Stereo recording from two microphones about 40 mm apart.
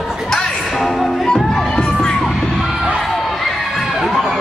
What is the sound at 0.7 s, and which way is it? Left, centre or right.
Music, centre.